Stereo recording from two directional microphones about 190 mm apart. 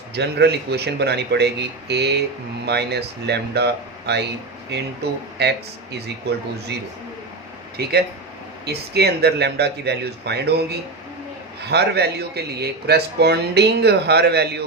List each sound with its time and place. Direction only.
0.1 s speech: 60° right (ahead or behind)
7.8 s speech: 55° right (ahead or behind)